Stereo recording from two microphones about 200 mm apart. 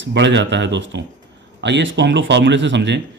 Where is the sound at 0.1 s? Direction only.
60° right (ahead or behind).